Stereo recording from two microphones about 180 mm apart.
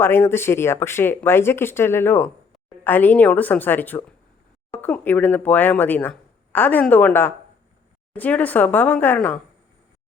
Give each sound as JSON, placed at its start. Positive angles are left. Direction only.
{"t": 0.0, "sound": "speech", "side_deg": 15}